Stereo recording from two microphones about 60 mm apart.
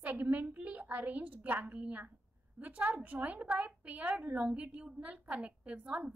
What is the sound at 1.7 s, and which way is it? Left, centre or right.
A woman's voice, right.